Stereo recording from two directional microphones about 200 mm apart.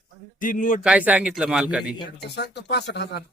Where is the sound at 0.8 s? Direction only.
5° right (ahead or behind).